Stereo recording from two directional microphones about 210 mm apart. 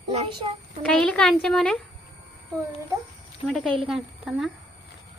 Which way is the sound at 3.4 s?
5° left (ahead or behind).